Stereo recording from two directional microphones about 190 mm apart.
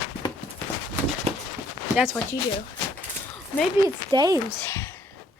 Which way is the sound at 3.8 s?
20° right (ahead or behind).